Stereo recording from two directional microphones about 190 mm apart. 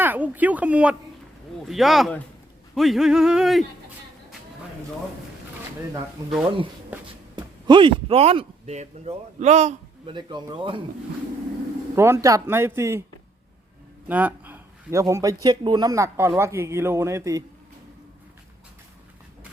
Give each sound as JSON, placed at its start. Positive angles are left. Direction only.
{"t": 0.0, "sound": "speech", "side_deg": -10}
{"t": 1.6, "sound": "a sound", "side_deg": 0}
{"t": 6.4, "sound": "speech", "side_deg": -25}
{"t": 10.2, "sound": "speech", "side_deg": -25}
{"t": 11.9, "sound": "a man's voice", "side_deg": -15}
{"t": 14.1, "sound": "a man's voice", "side_deg": -10}